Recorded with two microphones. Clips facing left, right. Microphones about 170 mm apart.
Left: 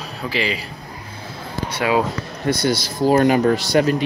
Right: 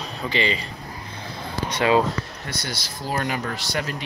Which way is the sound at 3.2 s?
35° left (ahead or behind).